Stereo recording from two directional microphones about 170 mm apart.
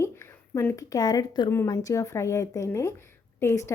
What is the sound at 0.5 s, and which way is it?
A woman's voice, 15° left (ahead or behind).